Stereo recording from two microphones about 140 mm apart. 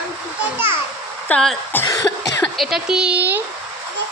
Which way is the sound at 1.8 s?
25° left (ahead or behind).